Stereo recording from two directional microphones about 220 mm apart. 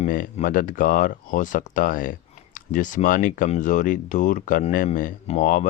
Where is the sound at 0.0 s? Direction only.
35° left (ahead or behind).